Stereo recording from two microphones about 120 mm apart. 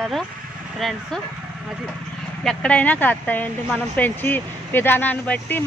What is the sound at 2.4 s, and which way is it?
Speech, 5° left (ahead or behind).